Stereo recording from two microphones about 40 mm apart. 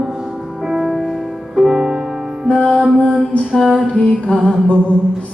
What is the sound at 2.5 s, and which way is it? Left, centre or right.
Music, left.